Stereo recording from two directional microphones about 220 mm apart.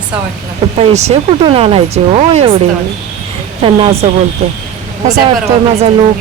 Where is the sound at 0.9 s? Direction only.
30° right (ahead or behind).